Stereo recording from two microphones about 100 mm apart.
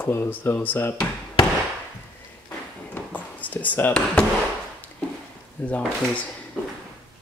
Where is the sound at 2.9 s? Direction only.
15° left (ahead or behind).